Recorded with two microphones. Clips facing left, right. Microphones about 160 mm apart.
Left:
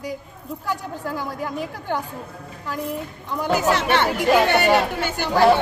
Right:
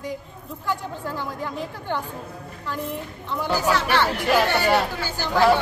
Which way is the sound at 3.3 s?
15° left (ahead or behind).